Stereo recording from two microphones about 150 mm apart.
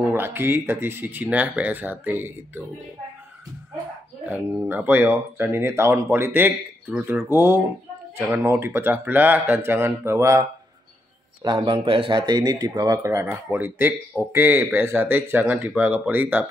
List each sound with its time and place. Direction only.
0.1 s speech: 15° right (ahead or behind)
4.3 s speech: 15° right (ahead or behind)
11.4 s speech: 35° right (ahead or behind); by 16.4 s 10° right (ahead or behind)